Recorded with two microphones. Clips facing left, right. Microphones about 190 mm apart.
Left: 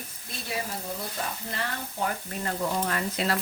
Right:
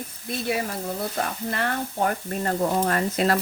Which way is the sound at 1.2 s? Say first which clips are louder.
Right 6 dB; 60° right (ahead or behind).